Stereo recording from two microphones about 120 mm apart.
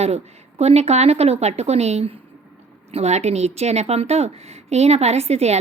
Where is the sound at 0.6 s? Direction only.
60° right (ahead or behind).